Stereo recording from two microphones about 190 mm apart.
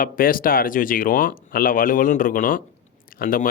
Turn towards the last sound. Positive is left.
turn(degrees=50)  # may be behind; listen again after turning